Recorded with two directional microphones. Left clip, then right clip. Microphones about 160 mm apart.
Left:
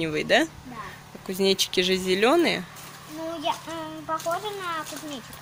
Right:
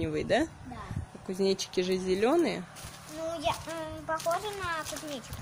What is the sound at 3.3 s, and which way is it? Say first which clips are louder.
Child singing: left 3 dB; 35° right (ahead or behind).